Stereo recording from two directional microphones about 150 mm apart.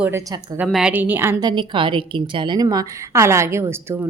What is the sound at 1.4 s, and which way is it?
A woman's voice, 30° right (ahead or behind).